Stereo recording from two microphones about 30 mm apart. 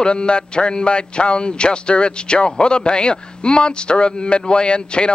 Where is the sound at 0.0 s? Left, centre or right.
Left.